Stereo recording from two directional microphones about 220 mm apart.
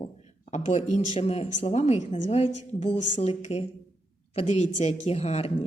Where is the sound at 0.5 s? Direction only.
30° left (ahead or behind).